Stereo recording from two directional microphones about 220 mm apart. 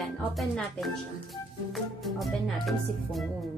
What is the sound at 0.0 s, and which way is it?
Speech, centre (ahead or behind).